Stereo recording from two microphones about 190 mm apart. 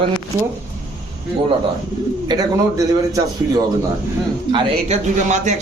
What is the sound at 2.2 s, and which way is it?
Speech, 20° right (ahead or behind).